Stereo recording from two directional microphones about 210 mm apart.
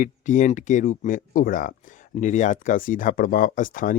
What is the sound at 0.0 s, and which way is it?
Speech, 35° left (ahead or behind).